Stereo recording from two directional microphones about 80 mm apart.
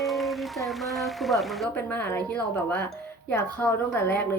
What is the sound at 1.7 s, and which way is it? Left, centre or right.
Speech, left.